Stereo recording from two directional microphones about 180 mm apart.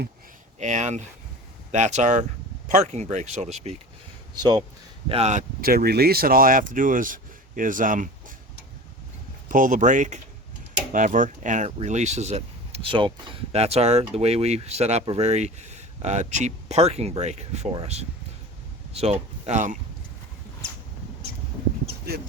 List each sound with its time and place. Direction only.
0.6 s speech: 40° right (ahead or behind)
5.0 s speech: 35° right (ahead or behind)
9.5 s speech: 45° right (ahead or behind)
18.9 s speech: 35° right (ahead or behind)
22.1 s speech: 60° right (ahead or behind)